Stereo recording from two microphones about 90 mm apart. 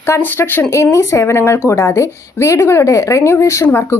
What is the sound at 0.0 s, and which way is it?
A woman's voice, 25° left (ahead or behind).